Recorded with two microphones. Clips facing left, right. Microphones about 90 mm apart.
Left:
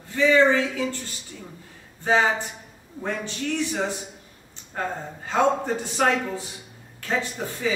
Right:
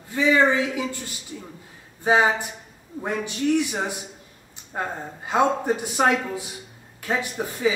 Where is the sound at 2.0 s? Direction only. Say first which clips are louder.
Right 2 dB; 15° right (ahead or behind).